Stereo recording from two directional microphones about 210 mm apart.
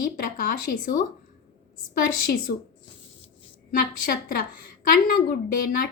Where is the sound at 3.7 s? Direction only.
45° left (ahead or behind).